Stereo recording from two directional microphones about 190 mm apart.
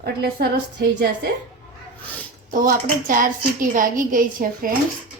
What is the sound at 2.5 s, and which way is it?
A woman's voice, 45° right (ahead or behind).